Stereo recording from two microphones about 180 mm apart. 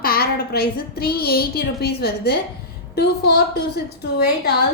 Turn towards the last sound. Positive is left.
turn(degrees=65)  # may be behind; listen again after turning